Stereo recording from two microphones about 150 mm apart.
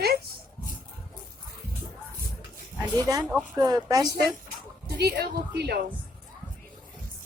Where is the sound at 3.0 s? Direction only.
25° right (ahead or behind).